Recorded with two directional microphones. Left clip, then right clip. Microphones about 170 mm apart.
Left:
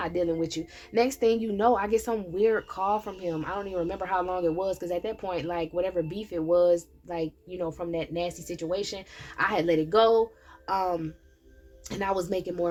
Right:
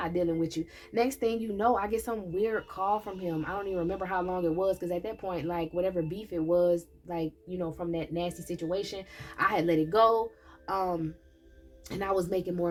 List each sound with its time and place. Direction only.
0.0 s speech: 35° left (ahead or behind)